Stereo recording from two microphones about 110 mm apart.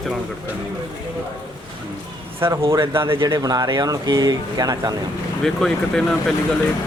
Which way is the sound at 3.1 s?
35° right (ahead or behind).